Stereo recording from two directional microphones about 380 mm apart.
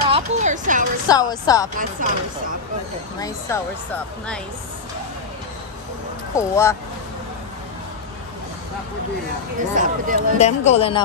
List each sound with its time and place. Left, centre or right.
0.1 s music: centre
1.0 s speech: centre
1.8 s speech: right
3.5 s speech: centre
6.3 s speech: centre
9.8 s speech: right
10.4 s speech: centre